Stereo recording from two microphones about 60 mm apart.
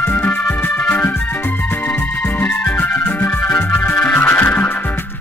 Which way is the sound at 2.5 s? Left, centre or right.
Left.